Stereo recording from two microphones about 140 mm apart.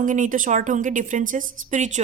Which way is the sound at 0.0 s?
65° right (ahead or behind).